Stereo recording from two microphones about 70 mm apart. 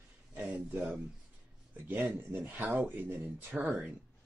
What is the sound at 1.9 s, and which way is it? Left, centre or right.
Speech, right.